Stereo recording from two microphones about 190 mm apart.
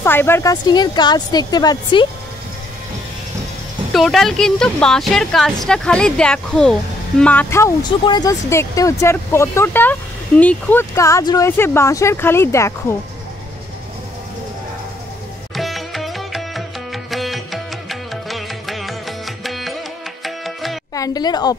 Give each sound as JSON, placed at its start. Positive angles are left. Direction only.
{"t": 0.0, "sound": "a woman's voice", "side_deg": 10}
{"t": 3.9, "sound": "a woman's voice", "side_deg": 0}
{"t": 15.5, "sound": "music", "side_deg": 0}
{"t": 20.2, "sound": "tabla", "side_deg": 0}
{"t": 20.9, "sound": "a woman's voice", "side_deg": 20}